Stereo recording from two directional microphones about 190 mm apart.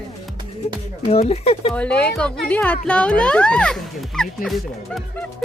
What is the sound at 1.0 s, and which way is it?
Speech, 35° left (ahead or behind).